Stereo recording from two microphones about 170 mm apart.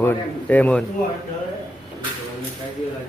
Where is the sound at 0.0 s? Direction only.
10° left (ahead or behind).